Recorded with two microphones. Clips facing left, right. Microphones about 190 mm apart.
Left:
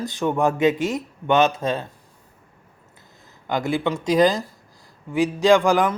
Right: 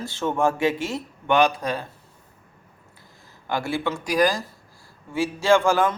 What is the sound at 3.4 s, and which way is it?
Speech, 20° left (ahead or behind).